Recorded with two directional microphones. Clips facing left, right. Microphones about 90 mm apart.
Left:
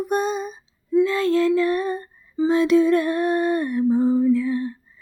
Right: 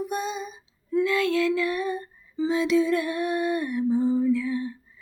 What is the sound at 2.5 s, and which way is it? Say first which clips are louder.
Music: left 6 dB; 50° left (ahead or behind).